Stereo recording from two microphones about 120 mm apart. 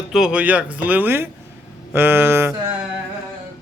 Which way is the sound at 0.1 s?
5° right (ahead or behind).